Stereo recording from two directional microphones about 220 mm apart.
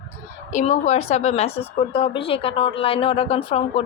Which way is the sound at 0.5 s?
30° left (ahead or behind).